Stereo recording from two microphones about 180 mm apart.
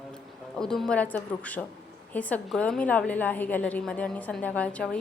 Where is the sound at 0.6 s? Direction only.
5° left (ahead or behind).